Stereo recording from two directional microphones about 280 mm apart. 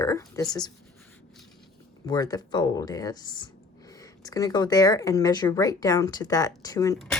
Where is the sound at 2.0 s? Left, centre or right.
Centre.